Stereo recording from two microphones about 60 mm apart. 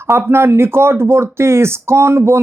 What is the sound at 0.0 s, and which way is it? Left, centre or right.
Speech, right.